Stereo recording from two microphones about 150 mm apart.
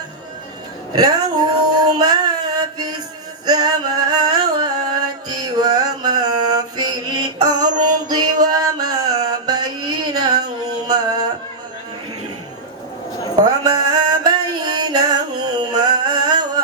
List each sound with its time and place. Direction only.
0.9 s a sound: 25° right (ahead or behind)
2.0 s mantra: 25° right (ahead or behind)
3.4 s music: 25° right (ahead or behind)
13.4 s music: 25° right (ahead or behind)